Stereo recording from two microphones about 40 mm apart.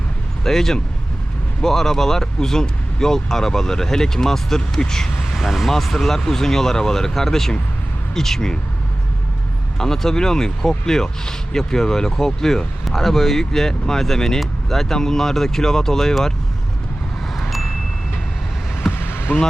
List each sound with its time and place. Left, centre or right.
0.4 s speech: centre
5.3 s speech: centre
5.7 s speech: centre
9.7 s speech: centre
18.9 s basketball bounce: left